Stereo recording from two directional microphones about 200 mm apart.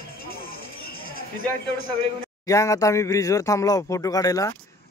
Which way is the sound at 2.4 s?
15° left (ahead or behind).